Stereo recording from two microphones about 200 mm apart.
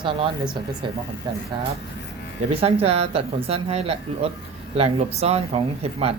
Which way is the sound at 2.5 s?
30° right (ahead or behind).